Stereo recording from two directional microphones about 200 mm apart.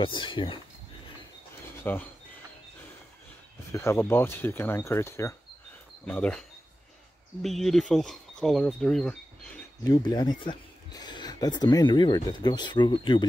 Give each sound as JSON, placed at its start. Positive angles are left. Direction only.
{"t": 0.0, "sound": "speech", "side_deg": 25}
{"t": 1.8, "sound": "speech", "side_deg": 10}
{"t": 3.7, "sound": "speech", "side_deg": 10}
{"t": 7.4, "sound": "speech", "side_deg": 0}
{"t": 9.8, "sound": "speech", "side_deg": 20}